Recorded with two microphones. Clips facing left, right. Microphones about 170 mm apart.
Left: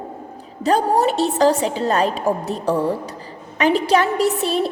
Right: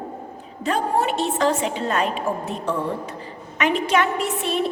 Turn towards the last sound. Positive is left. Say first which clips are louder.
# left 5 dB
turn(degrees=35)  # may be behind; listen again after turning